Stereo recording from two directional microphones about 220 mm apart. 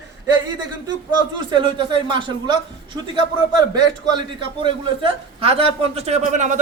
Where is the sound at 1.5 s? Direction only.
20° right (ahead or behind).